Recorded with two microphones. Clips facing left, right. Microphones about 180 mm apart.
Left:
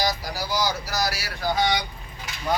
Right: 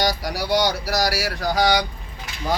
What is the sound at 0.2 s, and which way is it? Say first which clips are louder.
Speech: right 6 dB; 75° right (ahead or behind).